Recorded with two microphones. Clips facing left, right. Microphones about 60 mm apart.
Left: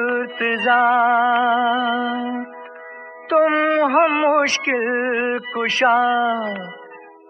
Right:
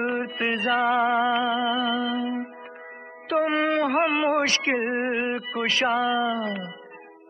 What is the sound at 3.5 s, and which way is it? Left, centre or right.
Music, left.